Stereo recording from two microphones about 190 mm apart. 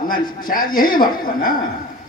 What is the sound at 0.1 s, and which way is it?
A man's voice, 50° left (ahead or behind).